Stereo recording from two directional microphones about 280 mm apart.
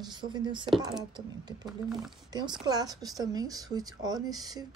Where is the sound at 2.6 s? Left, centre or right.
Centre.